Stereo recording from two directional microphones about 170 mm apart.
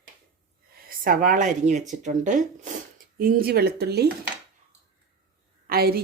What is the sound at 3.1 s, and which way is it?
Speech, 60° right (ahead or behind).